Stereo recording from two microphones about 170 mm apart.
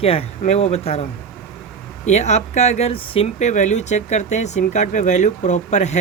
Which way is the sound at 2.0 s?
40° left (ahead or behind).